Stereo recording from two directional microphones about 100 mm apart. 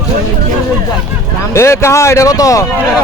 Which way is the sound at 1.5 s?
30° left (ahead or behind).